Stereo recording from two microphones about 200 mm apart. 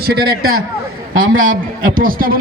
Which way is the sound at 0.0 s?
50° right (ahead or behind).